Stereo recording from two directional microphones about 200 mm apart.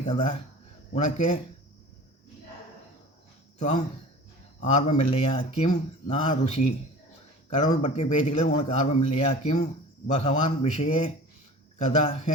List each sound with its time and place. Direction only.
0.0 s speech: 25° left (ahead or behind)
3.6 s a man's voice: 35° left (ahead or behind)